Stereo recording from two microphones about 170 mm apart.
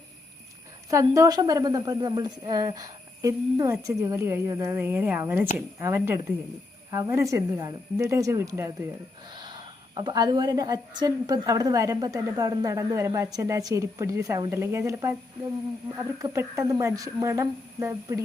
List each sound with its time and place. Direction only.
0.9 s a woman's voice: 20° right (ahead or behind)
9.3 s a woman's voice: 25° right (ahead or behind)
16.2 s speech: 15° right (ahead or behind)